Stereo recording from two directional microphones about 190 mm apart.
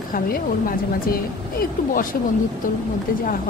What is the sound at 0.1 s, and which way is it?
Speech, 50° left (ahead or behind).